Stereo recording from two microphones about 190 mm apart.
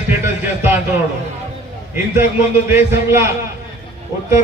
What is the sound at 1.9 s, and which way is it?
A man's voice, 10° right (ahead or behind).